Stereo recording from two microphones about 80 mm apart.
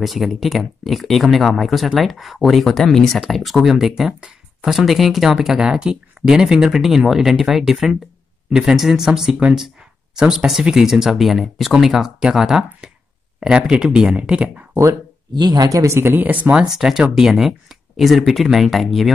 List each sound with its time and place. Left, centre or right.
0.0 s speech: centre
14.7 s speech: right
15.3 s speech: right
16.7 s speech: centre